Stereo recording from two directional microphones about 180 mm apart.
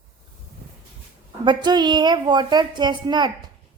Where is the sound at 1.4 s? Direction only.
25° right (ahead or behind).